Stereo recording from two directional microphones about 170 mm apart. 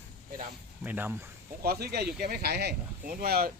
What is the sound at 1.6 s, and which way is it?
Speech, 65° right (ahead or behind).